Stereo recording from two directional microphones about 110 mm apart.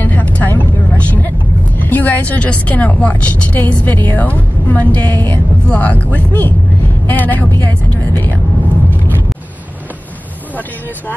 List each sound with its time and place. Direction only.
0.0 s vehicle: 15° left (ahead or behind)
1.8 s speech: 15° left (ahead or behind)